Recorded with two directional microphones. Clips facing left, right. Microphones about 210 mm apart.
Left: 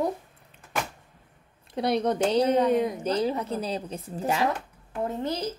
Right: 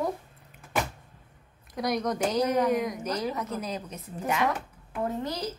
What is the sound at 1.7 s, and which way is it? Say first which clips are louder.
A woman's voice: left 4 dB; 30° left (ahead or behind).